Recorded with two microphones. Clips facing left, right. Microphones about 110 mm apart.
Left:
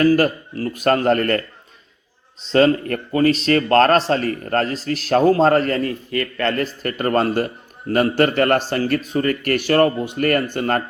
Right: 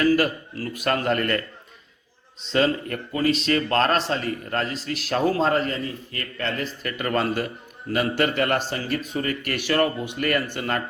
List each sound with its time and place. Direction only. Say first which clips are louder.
0.0 s a man's voice: left 5 dB; 40° left (ahead or behind)
2.5 s a man's voice: left 7 dB; 50° left (ahead or behind)
6.1 s speech: left 8 dB; 70° left (ahead or behind); by 6.9 s 55° left (ahead or behind)
6.9 s a man's voice: left 6 dB; 40° left (ahead or behind)